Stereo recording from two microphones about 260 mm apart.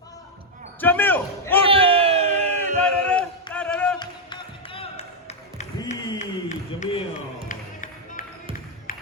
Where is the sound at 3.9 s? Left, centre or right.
Centre.